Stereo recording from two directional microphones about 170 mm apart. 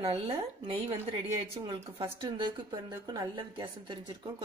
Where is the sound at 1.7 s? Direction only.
25° right (ahead or behind).